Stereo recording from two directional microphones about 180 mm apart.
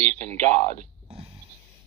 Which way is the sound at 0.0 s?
10° left (ahead or behind).